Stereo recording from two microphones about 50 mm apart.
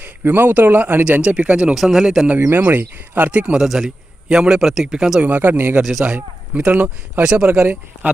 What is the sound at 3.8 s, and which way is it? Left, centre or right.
Speech, right.